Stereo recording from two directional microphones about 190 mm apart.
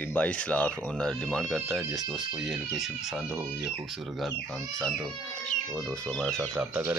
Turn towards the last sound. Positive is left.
turn(degrees=-10)  # may be behind; listen again after turning